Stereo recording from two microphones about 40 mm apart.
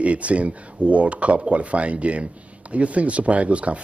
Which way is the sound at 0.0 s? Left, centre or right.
Right.